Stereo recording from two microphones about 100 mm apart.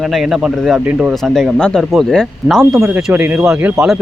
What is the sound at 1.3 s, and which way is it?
Speech, 5° left (ahead or behind).